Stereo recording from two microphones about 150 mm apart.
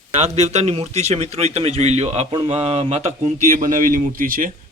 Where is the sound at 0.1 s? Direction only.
45° right (ahead or behind).